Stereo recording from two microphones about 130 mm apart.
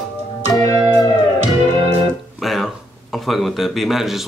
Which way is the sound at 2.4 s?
Centre (ahead or behind).